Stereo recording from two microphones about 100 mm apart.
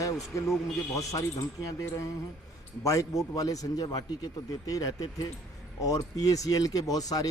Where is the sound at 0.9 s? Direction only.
35° left (ahead or behind).